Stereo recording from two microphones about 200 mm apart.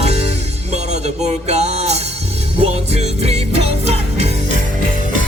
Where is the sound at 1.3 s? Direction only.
35° right (ahead or behind).